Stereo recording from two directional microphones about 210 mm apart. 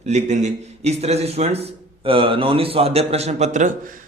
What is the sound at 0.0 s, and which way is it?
A man's voice, 35° right (ahead or behind).